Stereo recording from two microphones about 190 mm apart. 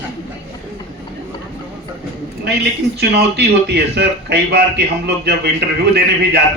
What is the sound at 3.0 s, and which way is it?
Speech, 60° right (ahead or behind).